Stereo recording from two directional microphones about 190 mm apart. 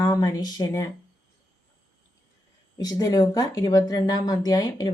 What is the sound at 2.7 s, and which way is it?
A woman's voice, 20° left (ahead or behind).